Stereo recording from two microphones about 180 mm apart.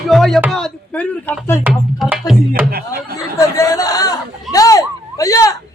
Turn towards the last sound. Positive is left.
turn(degrees=20)  # may be behind; listen again after turning